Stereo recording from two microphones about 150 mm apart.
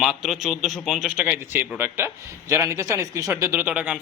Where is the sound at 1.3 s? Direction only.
15° right (ahead or behind).